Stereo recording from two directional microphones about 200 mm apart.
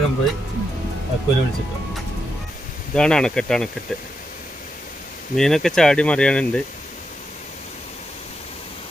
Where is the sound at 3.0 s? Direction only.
5° left (ahead or behind).